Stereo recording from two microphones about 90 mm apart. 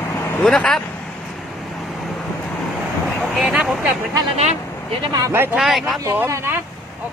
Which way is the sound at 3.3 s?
5° right (ahead or behind).